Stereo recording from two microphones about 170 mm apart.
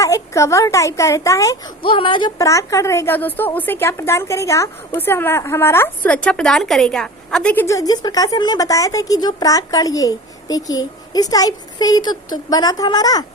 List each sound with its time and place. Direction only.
0.0 s a woman's voice: 20° left (ahead or behind)
1.8 s a woman's voice: 30° left (ahead or behind)